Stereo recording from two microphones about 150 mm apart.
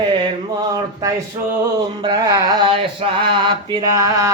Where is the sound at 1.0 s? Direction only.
20° right (ahead or behind).